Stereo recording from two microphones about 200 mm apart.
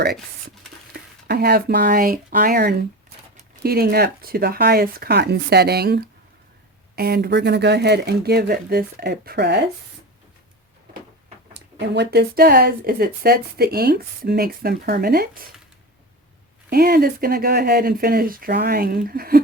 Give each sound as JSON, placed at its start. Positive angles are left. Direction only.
{"t": 0.9, "sound": "speech", "side_deg": -55}
{"t": 11.5, "sound": "speech", "side_deg": -55}
{"t": 16.6, "sound": "speech", "side_deg": -50}